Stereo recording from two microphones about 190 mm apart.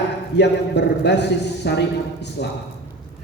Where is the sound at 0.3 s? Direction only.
65° left (ahead or behind).